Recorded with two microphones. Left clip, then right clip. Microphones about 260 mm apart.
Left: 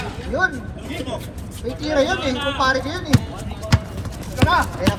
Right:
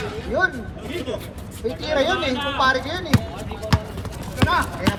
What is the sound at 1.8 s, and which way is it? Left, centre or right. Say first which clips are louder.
Speech: left 2 dB; right.